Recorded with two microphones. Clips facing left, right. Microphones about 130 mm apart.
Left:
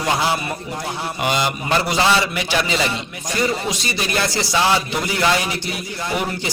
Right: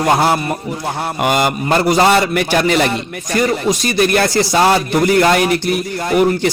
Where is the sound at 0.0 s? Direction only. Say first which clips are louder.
Right 6 dB; 50° right (ahead or behind).